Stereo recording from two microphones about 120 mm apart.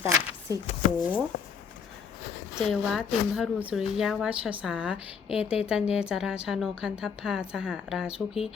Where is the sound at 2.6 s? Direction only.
Centre (ahead or behind).